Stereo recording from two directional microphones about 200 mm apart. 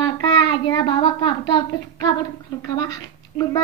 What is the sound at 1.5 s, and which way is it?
Speech, 20° left (ahead or behind).